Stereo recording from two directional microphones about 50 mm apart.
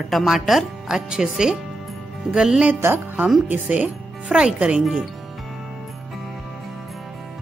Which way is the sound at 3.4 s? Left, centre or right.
Right.